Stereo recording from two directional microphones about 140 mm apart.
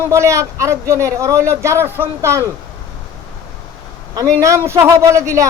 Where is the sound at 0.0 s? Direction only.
20° right (ahead or behind).